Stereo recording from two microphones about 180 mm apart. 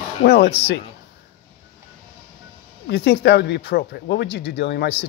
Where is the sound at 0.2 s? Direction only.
60° left (ahead or behind).